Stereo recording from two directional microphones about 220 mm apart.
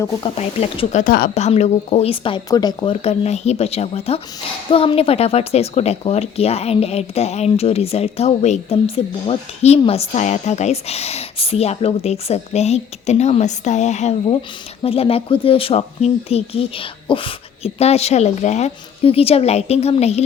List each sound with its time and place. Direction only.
0.3 s speech: 30° left (ahead or behind)